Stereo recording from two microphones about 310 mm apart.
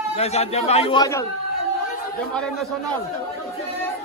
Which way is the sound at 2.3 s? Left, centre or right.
Centre.